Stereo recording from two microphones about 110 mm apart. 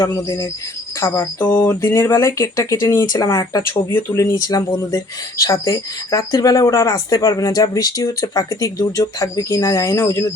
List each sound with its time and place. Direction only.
0.0 s speech: 35° left (ahead or behind)
0.9 s speech: 25° left (ahead or behind)